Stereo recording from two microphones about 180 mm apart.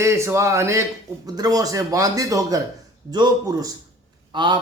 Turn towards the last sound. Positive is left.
turn(degrees=-25)  # may be behind; listen again after turning